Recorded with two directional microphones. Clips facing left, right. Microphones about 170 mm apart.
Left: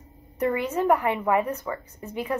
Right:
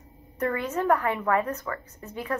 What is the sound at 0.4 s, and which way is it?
A woman's voice, 15° left (ahead or behind).